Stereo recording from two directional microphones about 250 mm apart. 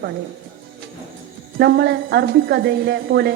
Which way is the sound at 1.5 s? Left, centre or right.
Right.